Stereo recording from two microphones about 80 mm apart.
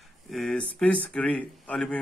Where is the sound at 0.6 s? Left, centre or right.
Centre.